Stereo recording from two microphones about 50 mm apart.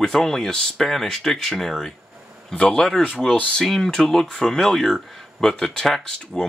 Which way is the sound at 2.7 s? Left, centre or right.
Centre.